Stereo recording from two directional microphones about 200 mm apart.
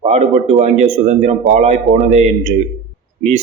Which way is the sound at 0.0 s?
35° right (ahead or behind).